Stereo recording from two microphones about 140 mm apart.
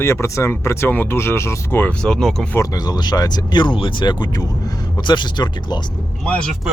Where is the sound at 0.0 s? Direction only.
20° left (ahead or behind).